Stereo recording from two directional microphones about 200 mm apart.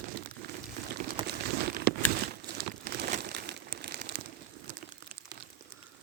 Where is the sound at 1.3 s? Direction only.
55° right (ahead or behind).